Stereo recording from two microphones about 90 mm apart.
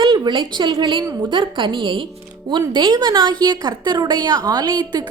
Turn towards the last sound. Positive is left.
turn(degrees=-55)  # may be behind; listen again after turning